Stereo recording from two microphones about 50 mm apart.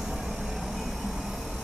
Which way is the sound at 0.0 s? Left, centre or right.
Centre.